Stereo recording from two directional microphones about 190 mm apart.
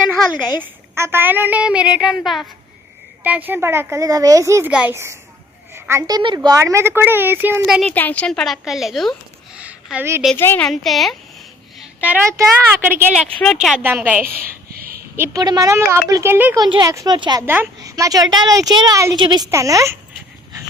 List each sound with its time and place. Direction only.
0.6 s a woman's voice: 15° right (ahead or behind)
7.8 s a woman's voice: 10° left (ahead or behind)
9.6 s a sound: 5° right (ahead or behind)
10.3 s a woman's voice: 10° left (ahead or behind)
10.7 s a woman's voice: centre (ahead or behind)
13.4 s a woman's voice: centre (ahead or behind)
14.7 s a sound: 50° right (ahead or behind)
15.1 s a woman's voice: 15° right (ahead or behind)
16.6 s speech: 20° right (ahead or behind)
17.4 s a woman's voice: 10° right (ahead or behind)